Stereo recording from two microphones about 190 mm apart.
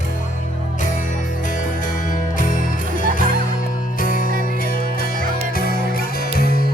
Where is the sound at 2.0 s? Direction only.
45° left (ahead or behind).